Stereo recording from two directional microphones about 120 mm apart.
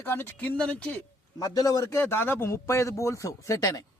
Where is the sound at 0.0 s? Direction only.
15° left (ahead or behind).